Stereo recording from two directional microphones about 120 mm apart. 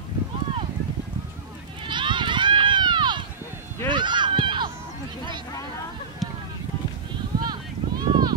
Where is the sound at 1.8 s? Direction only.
40° right (ahead or behind).